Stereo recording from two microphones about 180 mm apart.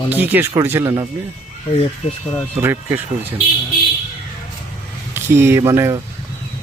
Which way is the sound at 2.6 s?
15° right (ahead or behind).